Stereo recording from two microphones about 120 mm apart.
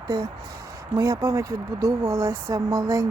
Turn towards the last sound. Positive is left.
turn(degrees=-30)  # may be behind; listen again after turning